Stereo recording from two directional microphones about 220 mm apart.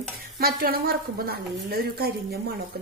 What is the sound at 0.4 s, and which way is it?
A woman's voice, 45° right (ahead or behind).